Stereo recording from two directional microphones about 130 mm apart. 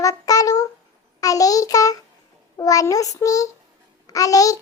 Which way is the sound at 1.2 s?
25° left (ahead or behind).